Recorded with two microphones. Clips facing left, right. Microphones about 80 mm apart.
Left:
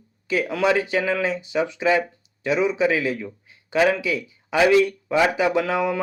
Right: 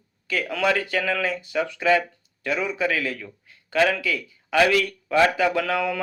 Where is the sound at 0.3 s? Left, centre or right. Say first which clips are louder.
Left 3 dB; centre.